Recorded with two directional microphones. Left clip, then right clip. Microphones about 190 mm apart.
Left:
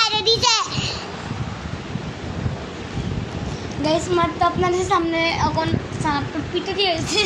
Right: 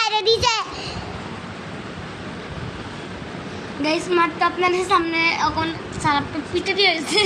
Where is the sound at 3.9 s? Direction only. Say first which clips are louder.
Even; 25° right (ahead or behind).